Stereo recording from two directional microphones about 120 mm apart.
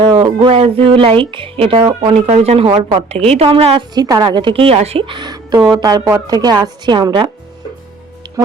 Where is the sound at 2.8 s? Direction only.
55° right (ahead or behind).